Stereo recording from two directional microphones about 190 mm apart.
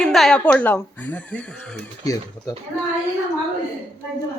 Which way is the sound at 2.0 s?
20° left (ahead or behind).